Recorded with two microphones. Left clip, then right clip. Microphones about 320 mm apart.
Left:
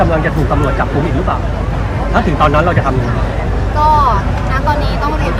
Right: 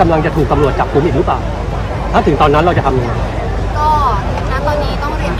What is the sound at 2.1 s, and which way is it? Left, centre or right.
Speech, centre.